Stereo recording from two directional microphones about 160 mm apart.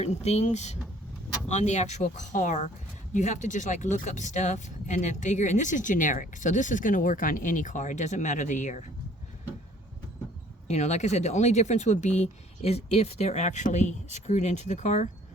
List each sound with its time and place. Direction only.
0.0 s speech: 45° left (ahead or behind)
10.7 s speech: 45° left (ahead or behind)